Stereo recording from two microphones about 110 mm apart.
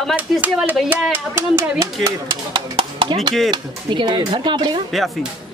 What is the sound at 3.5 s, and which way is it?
Speech, 40° right (ahead or behind).